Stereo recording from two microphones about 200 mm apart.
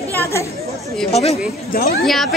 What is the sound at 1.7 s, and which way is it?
Speech, 50° left (ahead or behind).